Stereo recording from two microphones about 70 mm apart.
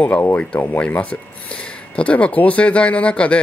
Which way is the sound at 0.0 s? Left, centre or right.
Left.